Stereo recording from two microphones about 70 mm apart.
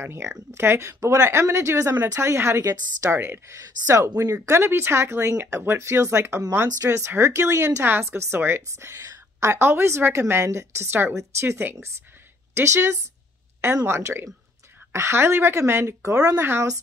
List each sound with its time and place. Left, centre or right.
0.0 s a woman's voice: right
2.6 s a woman's voice: right
3.1 s a woman's voice: right
3.5 s a woman's voice: right
7.8 s a woman's voice: right
16.3 s a woman's voice: right